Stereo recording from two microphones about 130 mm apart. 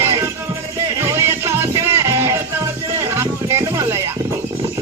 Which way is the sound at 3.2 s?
20° right (ahead or behind).